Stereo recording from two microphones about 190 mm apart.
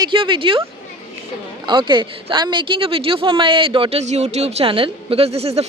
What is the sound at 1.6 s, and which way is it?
Speech, 25° right (ahead or behind).